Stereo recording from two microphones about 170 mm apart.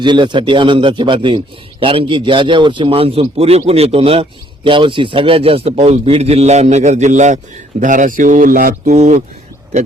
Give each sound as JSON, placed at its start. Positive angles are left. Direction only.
{"t": 0.0, "sound": "a man's voice", "side_deg": -25}
{"t": 8.9, "sound": "a man's voice", "side_deg": -40}